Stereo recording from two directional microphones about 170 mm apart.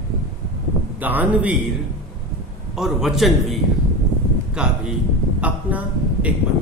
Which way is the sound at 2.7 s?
Centre (ahead or behind).